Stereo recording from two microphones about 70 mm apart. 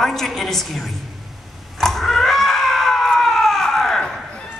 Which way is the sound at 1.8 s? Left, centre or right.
Centre.